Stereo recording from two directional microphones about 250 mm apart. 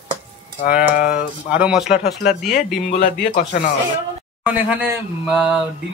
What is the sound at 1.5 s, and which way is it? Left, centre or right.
Speech, centre.